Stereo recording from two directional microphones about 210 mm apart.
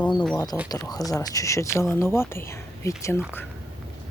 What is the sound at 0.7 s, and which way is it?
Speech, 15° left (ahead or behind).